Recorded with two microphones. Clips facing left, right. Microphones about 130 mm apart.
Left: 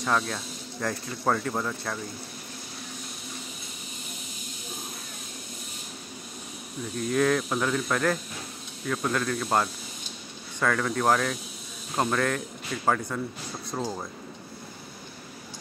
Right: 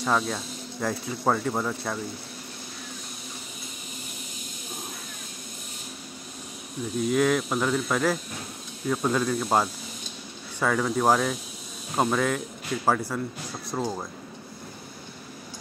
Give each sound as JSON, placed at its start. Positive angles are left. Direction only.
{"t": 0.0, "sound": "speech", "side_deg": -5}
{"t": 7.0, "sound": "speech", "side_deg": -5}